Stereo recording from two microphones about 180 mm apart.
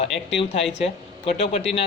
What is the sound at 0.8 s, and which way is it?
Speech, 35° left (ahead or behind).